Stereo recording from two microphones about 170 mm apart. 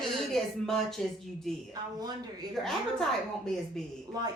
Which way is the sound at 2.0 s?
25° right (ahead or behind).